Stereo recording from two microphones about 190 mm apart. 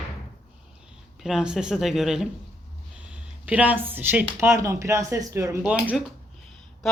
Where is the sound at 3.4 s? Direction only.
10° right (ahead or behind).